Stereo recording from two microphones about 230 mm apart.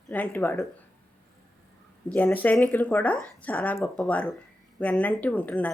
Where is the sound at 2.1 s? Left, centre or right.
Centre.